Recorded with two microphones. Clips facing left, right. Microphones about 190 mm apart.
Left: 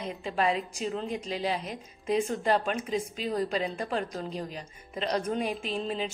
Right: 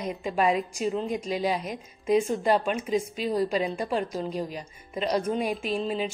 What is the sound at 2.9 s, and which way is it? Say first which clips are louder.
Speech: right 4 dB; 40° right (ahead or behind).